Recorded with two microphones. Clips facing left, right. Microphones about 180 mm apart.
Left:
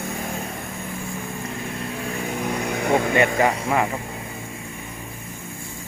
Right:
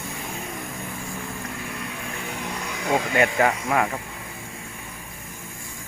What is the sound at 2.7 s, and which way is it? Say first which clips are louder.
Vehicle: left 3 dB; 55° left (ahead or behind).